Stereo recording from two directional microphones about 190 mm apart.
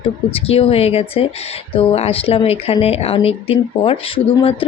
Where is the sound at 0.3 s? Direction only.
30° left (ahead or behind).